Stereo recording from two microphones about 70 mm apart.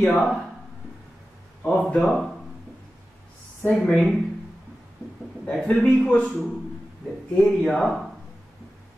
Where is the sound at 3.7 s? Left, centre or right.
Centre.